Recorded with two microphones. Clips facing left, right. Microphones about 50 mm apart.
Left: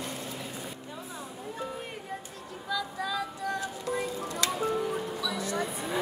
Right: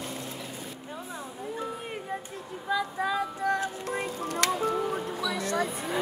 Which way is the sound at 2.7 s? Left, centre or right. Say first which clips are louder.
Right 4 dB; right.